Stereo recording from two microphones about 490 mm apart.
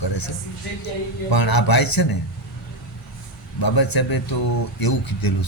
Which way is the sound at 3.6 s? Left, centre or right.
Left.